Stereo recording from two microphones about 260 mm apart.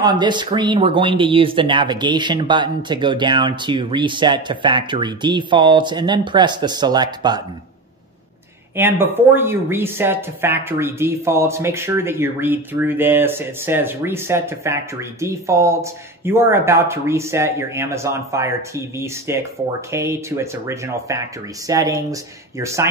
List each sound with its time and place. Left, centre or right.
0.0 s speech: centre
8.7 s speech: centre